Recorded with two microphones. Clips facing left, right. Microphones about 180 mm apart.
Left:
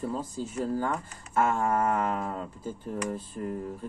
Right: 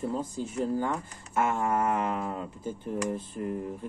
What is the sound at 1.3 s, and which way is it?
Speech, 15° right (ahead or behind).